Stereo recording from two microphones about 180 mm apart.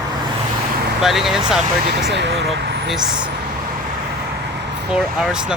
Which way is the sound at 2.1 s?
75° right (ahead or behind).